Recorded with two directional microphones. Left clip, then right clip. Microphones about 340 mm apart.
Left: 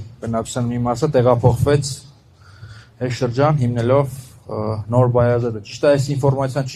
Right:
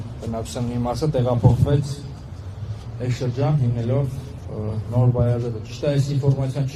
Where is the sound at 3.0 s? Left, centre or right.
Right.